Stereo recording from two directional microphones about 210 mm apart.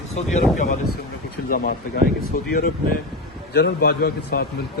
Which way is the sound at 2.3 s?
40° left (ahead or behind).